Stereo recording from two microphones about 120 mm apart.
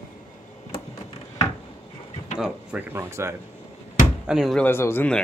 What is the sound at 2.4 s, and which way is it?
Speech, 10° right (ahead or behind).